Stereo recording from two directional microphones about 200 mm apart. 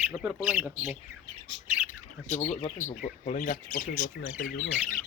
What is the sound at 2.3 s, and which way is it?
Speech, 35° left (ahead or behind).